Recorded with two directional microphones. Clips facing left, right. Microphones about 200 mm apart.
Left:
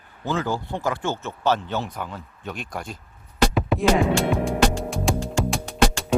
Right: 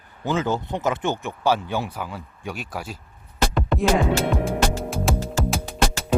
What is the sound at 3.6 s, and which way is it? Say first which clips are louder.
Music: right 1 dB; 5° left (ahead or behind).